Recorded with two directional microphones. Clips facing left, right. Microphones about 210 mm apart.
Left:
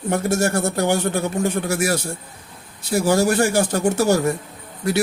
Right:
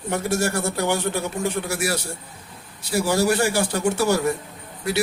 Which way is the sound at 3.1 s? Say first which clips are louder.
Left 3 dB; 45° left (ahead or behind).